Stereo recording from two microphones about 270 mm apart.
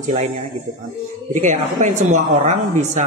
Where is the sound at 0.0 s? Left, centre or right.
Right.